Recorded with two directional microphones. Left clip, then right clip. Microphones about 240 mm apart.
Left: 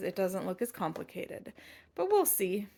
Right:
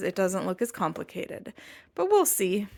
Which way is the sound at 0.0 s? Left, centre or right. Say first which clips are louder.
Right 6 dB; right.